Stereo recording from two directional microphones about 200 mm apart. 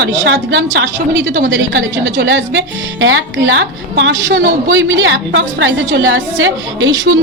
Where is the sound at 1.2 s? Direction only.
65° right (ahead or behind).